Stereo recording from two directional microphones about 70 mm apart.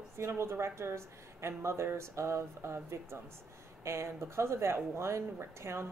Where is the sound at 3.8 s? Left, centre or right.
Right.